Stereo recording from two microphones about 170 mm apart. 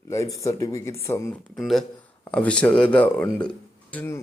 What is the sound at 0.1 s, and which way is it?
Speech, 20° left (ahead or behind).